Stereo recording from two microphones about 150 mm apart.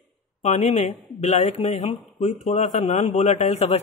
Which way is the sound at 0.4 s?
50° left (ahead or behind).